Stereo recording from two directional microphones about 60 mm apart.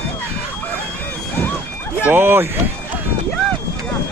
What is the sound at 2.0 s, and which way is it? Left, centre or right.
Speech, right.